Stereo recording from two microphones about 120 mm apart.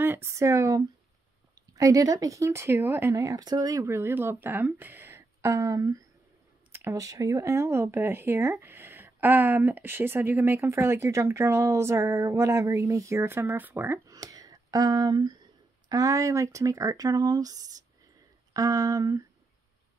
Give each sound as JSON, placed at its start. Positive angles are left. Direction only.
{"t": 0.0, "sound": "speech", "side_deg": -20}
{"t": 6.7, "sound": "a sound", "side_deg": -20}
{"t": 7.0, "sound": "speech", "side_deg": -30}